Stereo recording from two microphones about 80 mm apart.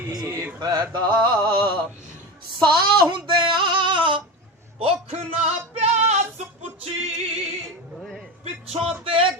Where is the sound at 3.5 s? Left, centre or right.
Right.